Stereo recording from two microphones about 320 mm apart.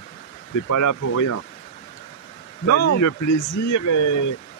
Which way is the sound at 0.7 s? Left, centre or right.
Left.